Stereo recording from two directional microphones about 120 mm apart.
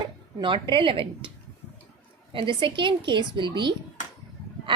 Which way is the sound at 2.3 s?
45° right (ahead or behind).